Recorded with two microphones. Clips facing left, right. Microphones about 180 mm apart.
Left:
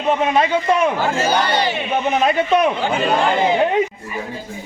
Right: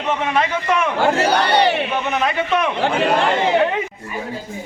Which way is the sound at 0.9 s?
70° right (ahead or behind).